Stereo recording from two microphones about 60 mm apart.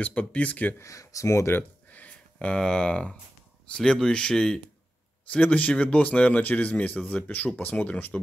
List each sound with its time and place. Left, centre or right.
0.0 s speech: left
0.7 s speech: left
1.9 s a sound: left
2.3 s speech: centre
5.3 s speech: left